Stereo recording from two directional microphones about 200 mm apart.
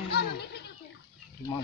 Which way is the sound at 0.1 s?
55° left (ahead or behind).